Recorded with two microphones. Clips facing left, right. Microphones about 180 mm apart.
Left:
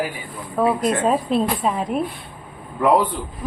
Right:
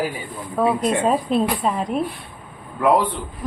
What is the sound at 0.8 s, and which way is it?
A man's voice, centre (ahead or behind).